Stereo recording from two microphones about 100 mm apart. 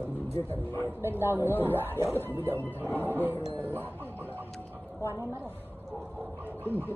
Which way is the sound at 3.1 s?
20° right (ahead or behind).